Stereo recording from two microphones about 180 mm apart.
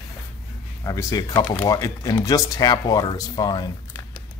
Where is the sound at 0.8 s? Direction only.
20° left (ahead or behind).